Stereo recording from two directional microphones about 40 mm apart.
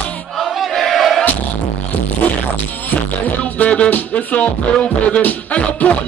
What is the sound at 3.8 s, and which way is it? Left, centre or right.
Music, left.